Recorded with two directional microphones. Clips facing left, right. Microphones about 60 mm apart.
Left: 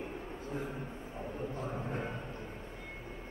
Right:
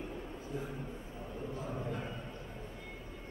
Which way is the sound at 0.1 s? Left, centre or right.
Left.